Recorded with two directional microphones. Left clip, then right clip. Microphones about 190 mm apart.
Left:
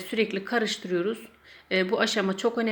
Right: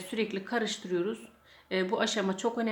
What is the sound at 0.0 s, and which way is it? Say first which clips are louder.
Speech: left 6 dB; centre (ahead or behind).